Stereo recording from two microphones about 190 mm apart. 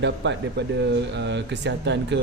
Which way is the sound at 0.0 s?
65° right (ahead or behind).